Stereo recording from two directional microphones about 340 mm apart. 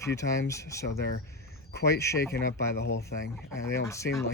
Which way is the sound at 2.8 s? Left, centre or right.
Left.